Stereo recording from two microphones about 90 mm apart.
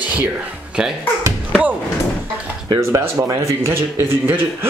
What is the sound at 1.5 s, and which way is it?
Slam, 15° right (ahead or behind).